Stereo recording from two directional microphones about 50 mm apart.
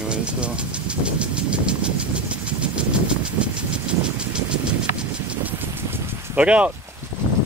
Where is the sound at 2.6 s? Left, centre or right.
Right.